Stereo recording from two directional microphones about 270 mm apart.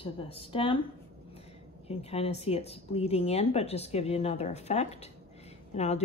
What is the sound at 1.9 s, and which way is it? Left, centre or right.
Speech, left.